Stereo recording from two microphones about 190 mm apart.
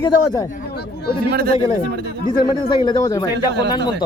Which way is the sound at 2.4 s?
25° left (ahead or behind).